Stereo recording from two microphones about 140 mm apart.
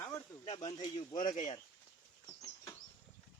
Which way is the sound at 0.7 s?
30° left (ahead or behind).